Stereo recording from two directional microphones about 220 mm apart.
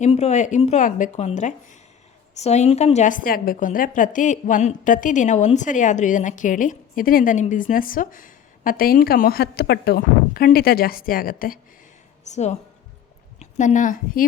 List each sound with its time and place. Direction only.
0.0 s a woman's voice: 30° left (ahead or behind)